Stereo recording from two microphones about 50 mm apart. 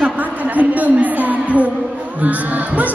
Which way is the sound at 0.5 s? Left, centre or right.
Right.